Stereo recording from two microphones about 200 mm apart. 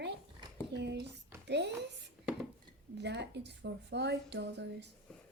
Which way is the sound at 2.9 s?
60° right (ahead or behind).